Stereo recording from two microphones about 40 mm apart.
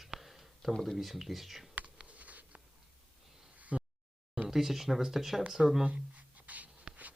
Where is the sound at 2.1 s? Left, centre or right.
Right.